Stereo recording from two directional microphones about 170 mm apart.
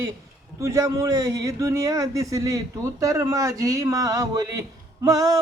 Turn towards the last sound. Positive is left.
turn(degrees=-20)  # may be behind; listen again after turning